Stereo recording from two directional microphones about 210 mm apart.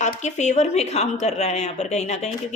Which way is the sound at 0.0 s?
35° left (ahead or behind).